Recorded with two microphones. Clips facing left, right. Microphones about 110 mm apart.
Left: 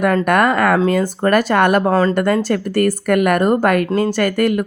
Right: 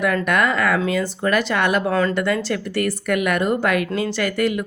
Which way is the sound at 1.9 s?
35° left (ahead or behind).